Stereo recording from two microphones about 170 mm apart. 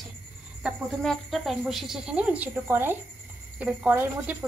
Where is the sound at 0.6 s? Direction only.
Centre (ahead or behind).